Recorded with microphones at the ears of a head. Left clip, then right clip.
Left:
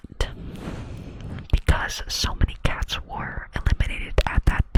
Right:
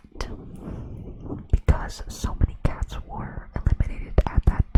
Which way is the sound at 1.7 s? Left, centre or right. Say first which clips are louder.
Left 11 dB; left.